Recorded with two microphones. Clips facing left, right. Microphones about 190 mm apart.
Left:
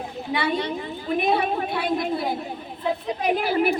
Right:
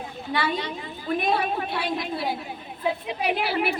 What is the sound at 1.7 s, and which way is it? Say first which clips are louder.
Speech: left 4 dB; 50° left (ahead or behind).